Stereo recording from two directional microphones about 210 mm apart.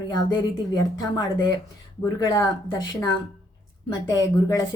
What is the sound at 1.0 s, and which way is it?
Speech, 20° left (ahead or behind).